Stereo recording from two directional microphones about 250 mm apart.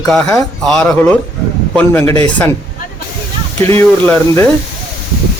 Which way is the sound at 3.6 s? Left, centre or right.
Right.